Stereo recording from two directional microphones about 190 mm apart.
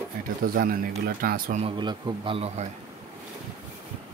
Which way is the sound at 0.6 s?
50° right (ahead or behind).